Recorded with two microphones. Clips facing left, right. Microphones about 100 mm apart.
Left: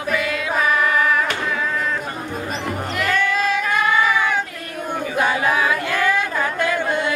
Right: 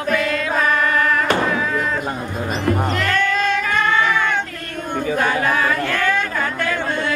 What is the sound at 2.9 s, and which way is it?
Music, 10° left (ahead or behind).